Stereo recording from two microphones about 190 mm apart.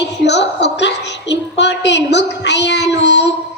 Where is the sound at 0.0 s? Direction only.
65° left (ahead or behind).